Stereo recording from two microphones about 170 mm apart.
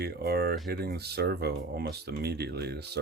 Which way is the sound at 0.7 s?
70° right (ahead or behind).